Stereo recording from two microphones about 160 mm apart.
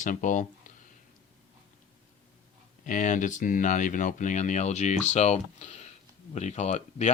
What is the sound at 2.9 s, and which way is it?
Speech, 55° left (ahead or behind).